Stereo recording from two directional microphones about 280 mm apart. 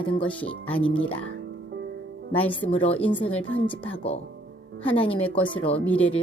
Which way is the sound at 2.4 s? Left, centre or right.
Centre.